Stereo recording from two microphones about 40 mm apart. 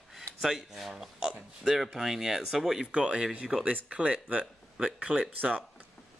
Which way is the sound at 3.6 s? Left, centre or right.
Right.